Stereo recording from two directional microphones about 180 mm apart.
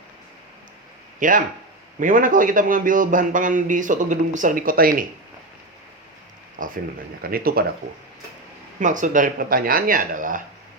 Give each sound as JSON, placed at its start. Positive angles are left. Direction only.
{"t": 1.2, "sound": "a man's voice", "side_deg": -50}
{"t": 6.6, "sound": "a man's voice", "side_deg": -50}
{"t": 8.8, "sound": "a man's voice", "side_deg": -45}